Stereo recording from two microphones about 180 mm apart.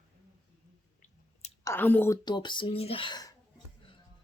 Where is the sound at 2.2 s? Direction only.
25° left (ahead or behind).